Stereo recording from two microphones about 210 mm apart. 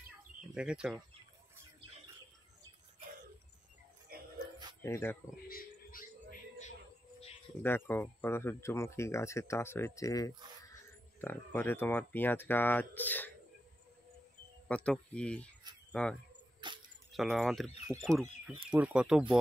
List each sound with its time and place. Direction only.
0.6 s speech: 5° right (ahead or behind)
4.1 s music: 45° right (ahead or behind)
4.8 s speech: 10° left (ahead or behind)
5.5 s music: 40° left (ahead or behind)
7.6 s speech: 10° left (ahead or behind)
14.7 s speech: 5° left (ahead or behind)
16.6 s camera: 20° right (ahead or behind)
17.4 s speech: centre (ahead or behind)